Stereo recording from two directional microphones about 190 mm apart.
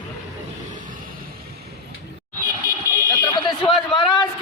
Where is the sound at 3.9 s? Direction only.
25° left (ahead or behind).